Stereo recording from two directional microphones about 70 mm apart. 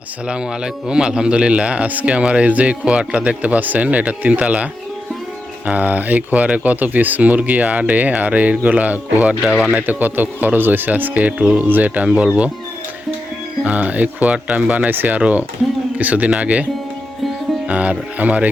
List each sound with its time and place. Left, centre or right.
0.3 s a man's voice: centre
9.4 s a man's voice: centre
9.7 s speech: right
13.7 s speech: right
17.7 s speech: centre